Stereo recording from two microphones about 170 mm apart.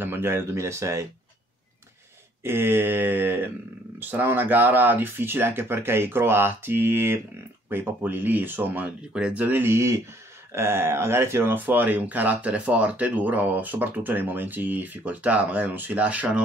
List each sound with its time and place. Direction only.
0.0 s speech: 15° right (ahead or behind)
2.4 s speech: 15° right (ahead or behind)